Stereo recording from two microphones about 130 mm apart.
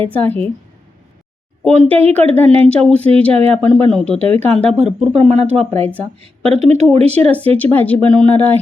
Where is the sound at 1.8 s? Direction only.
10° left (ahead or behind).